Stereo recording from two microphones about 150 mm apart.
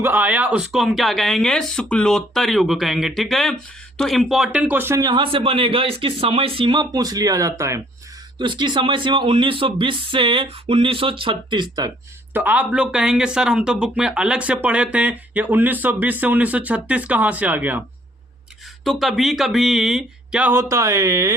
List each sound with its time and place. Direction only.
0.0 s speech: 10° right (ahead or behind)
8.4 s speech: 30° right (ahead or behind)
12.3 s speech: 10° right (ahead or behind)
18.9 s speech: centre (ahead or behind); by 21.3 s 20° right (ahead or behind)